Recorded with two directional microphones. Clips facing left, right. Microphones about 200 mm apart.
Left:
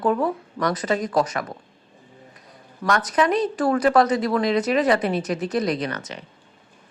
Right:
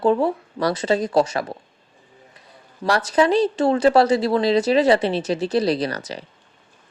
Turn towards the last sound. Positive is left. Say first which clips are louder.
# right 3 dB
turn(degrees=-35)  # may be behind; listen again after turning